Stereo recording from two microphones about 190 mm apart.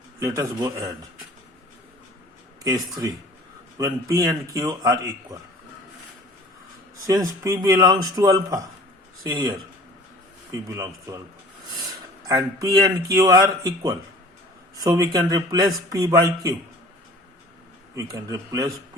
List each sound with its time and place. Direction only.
0.2 s a man's voice: 15° right (ahead or behind)
2.6 s a man's voice: 20° right (ahead or behind)
7.1 s a man's voice: 15° right (ahead or behind)
12.2 s a man's voice: 20° right (ahead or behind)
18.3 s a man's voice: 20° right (ahead or behind)